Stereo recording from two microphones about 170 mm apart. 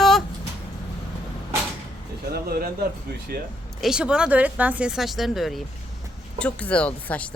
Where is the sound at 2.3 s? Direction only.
65° right (ahead or behind).